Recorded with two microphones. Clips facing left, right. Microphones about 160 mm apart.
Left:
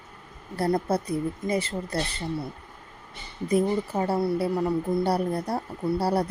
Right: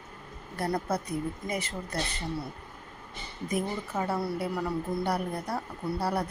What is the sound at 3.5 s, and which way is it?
A woman's voice, 30° left (ahead or behind).